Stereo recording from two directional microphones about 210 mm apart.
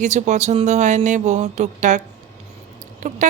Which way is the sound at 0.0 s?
35° right (ahead or behind).